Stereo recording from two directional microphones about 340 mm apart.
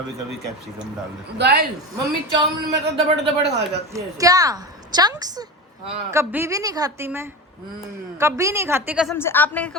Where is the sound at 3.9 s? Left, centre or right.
Centre.